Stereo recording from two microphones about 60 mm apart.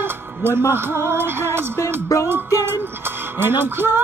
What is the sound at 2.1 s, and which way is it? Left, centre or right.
Music, left.